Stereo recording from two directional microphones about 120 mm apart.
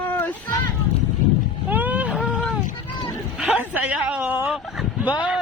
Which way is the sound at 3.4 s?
15° right (ahead or behind).